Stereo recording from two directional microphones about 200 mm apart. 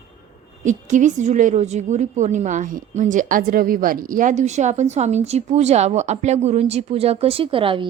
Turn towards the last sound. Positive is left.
turn(degrees=-25)  # may be behind; listen again after turning